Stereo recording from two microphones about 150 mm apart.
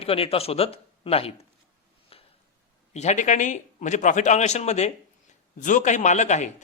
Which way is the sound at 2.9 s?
50° left (ahead or behind).